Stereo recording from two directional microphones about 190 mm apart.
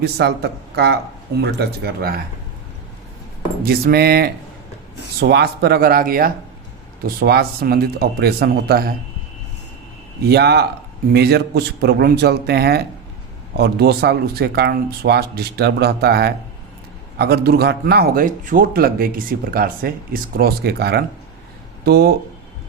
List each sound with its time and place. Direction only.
0.0 s speech: 60° right (ahead or behind)
3.6 s a man's voice: 55° right (ahead or behind)
10.2 s a man's voice: 60° right (ahead or behind)